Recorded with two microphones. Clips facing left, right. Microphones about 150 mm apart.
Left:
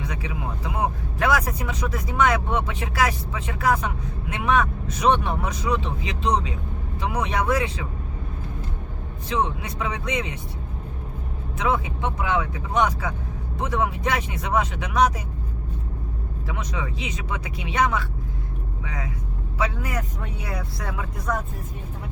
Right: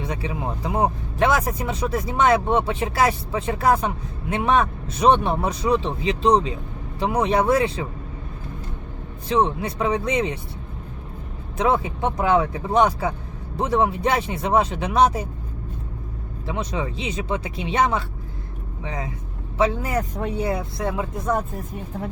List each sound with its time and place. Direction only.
0.0 s speech: 30° right (ahead or behind)
9.3 s speech: 30° right (ahead or behind)
11.5 s speech: 35° right (ahead or behind)
16.5 s speech: 30° right (ahead or behind)